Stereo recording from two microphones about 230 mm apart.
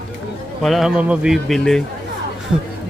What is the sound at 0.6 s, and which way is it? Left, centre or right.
A man's voice, centre.